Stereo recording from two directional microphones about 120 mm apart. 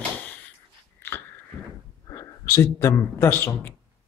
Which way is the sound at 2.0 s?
25° left (ahead or behind).